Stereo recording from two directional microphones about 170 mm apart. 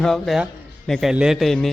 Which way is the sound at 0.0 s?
Centre (ahead or behind).